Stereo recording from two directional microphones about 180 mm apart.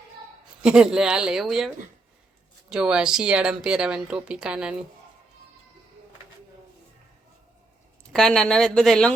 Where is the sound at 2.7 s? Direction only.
5° right (ahead or behind).